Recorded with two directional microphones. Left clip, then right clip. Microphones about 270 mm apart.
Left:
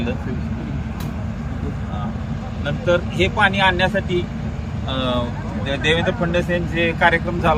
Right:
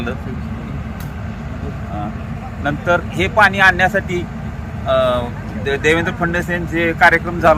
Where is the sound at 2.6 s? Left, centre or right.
Centre.